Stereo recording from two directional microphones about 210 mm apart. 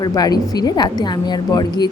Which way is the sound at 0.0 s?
20° left (ahead or behind).